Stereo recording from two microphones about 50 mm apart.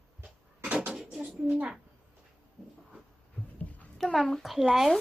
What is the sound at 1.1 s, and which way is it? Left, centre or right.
Speech, centre.